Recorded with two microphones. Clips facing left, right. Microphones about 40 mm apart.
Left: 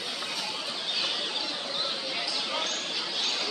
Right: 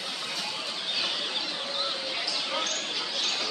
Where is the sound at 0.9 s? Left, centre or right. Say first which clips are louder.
Right 1 dB; centre.